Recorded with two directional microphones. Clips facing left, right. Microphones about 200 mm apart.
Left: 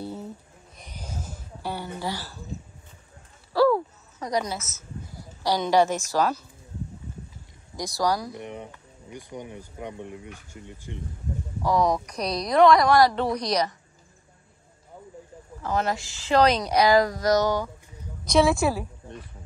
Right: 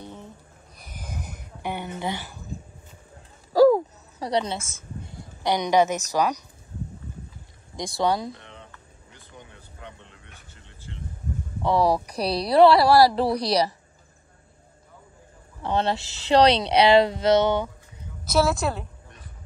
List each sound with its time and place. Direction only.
0.0 s a sound: 40° left (ahead or behind)
0.9 s a sound: 15° right (ahead or behind)
3.5 s a sound: 40° right (ahead or behind)
4.3 s a woman's voice: 30° right (ahead or behind)
7.7 s speech: 25° right (ahead or behind)
8.4 s speech: 15° left (ahead or behind)
11.6 s speech: 30° right (ahead or behind)
15.6 s speech: 30° right (ahead or behind)
18.2 s a woman's voice: 5° right (ahead or behind)